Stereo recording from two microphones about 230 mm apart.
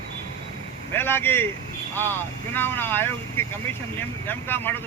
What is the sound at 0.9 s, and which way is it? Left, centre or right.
Speech, centre.